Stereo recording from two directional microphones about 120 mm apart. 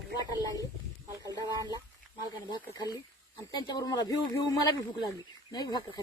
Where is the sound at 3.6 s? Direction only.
35° left (ahead or behind).